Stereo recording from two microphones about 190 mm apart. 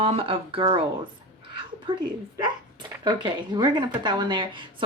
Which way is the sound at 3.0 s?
25° right (ahead or behind).